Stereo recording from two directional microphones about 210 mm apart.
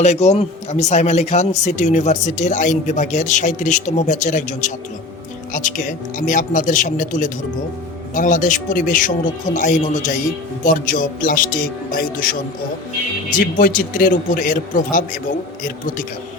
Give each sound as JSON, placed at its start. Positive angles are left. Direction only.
{"t": 0.0, "sound": "speech", "side_deg": 30}
{"t": 13.4, "sound": "speech", "side_deg": 40}